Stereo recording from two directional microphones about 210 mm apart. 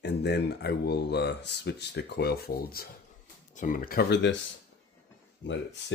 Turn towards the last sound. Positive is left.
turn(degrees=60)  # may be behind; listen again after turning